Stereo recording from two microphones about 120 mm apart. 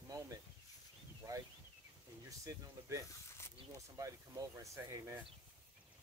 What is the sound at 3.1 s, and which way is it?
Snake, 20° left (ahead or behind).